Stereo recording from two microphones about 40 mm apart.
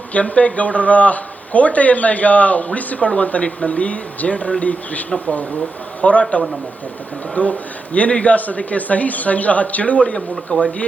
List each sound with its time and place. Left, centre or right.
0.1 s a man's voice: left
10.2 s speech: left